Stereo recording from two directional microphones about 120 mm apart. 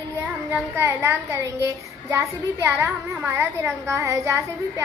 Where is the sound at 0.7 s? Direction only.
20° right (ahead or behind).